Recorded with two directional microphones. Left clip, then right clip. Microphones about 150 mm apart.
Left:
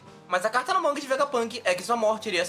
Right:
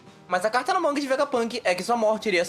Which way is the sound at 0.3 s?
35° right (ahead or behind).